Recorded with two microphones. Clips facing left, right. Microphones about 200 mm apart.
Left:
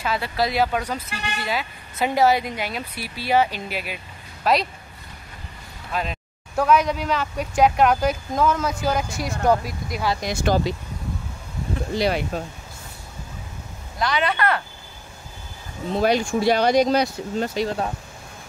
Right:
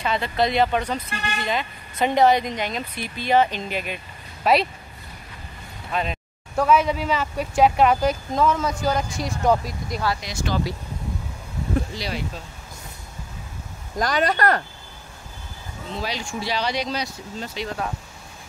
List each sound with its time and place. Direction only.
0.0 s speech: 5° left (ahead or behind)
5.9 s speech: centre (ahead or behind)
10.2 s speech: 50° left (ahead or behind)
11.9 s speech: 60° left (ahead or behind)
13.9 s speech: 45° right (ahead or behind)
16.0 s speech: 55° left (ahead or behind)